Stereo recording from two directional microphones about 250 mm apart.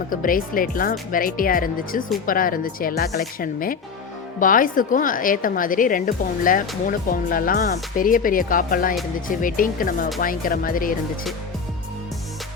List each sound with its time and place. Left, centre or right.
0.1 s a woman's voice: left